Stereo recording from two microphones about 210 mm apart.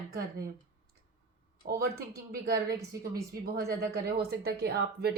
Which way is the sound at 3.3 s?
50° right (ahead or behind).